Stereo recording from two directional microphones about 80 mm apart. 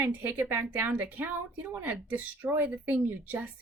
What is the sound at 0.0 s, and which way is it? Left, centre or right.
A woman's voice, right.